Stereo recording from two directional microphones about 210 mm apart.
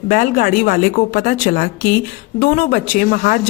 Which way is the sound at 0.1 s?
40° left (ahead or behind).